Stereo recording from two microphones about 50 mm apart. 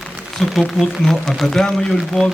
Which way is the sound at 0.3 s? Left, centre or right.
Centre.